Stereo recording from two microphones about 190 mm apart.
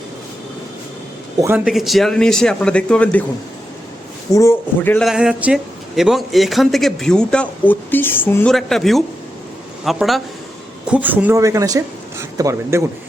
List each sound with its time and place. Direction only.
1.4 s a man's voice: 10° right (ahead or behind); by 3.2 s 5° left (ahead or behind)
4.3 s a man's voice: 15° left (ahead or behind)
5.0 s a man's voice: 5° right (ahead or behind)